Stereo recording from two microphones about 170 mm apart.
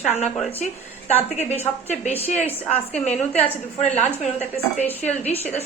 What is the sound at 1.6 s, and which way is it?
Speech, 40° left (ahead or behind).